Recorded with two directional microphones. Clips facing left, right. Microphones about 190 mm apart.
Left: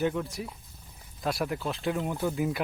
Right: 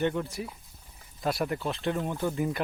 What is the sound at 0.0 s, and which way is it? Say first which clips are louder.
Speech: even; centre (ahead or behind).